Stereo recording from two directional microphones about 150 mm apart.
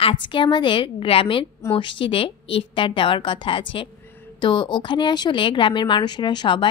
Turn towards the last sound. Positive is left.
turn(degrees=30)  # may be behind; listen again after turning